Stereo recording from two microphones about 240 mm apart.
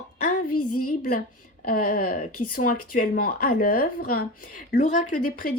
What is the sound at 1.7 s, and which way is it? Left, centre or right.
A woman's voice, left.